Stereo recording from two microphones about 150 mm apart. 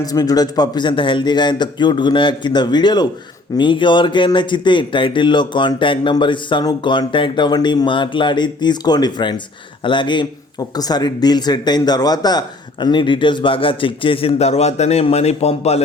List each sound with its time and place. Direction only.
0.0 s speech: 25° left (ahead or behind); by 15.8 s 45° left (ahead or behind)